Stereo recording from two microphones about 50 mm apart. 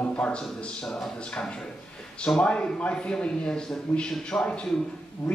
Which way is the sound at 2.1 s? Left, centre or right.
Centre.